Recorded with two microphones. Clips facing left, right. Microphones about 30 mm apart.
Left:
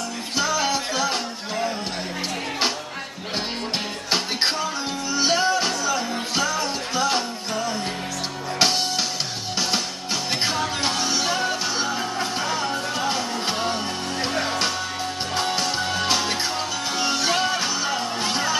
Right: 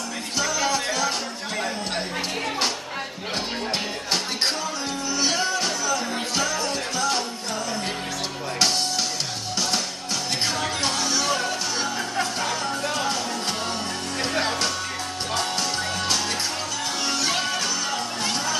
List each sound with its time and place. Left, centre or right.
0.4 s music: centre
5.1 s music: centre
10.8 s music: centre
15.3 s music: centre